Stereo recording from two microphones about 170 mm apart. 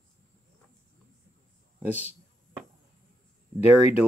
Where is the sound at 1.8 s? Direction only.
10° right (ahead or behind).